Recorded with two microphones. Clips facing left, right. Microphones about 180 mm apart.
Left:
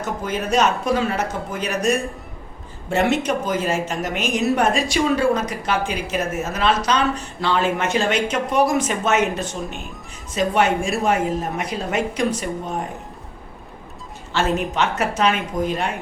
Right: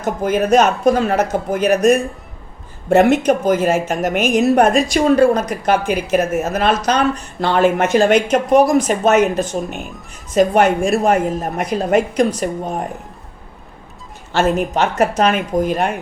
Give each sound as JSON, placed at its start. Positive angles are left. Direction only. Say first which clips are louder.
{"t": 0.0, "sound": "a woman's voice", "louder": "right 8 dB", "side_deg": -50}
{"t": 14.3, "sound": "a woman's voice", "louder": "right 5 dB", "side_deg": -50}
{"t": 14.7, "sound": "a woman's voice", "louder": "right 5 dB", "side_deg": -40}